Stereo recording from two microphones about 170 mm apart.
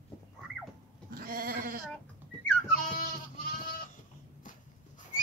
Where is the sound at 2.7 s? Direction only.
55° left (ahead or behind).